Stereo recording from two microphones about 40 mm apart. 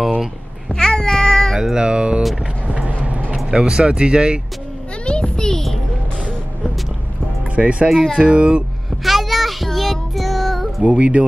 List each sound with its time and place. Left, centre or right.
0.7 s cat: centre
1.8 s music: right
3.4 s speech: right
5.0 s a sound: left
7.5 s music: right
7.9 s speech: centre
8.2 s speech: right
9.0 s child singing: centre
10.8 s music: right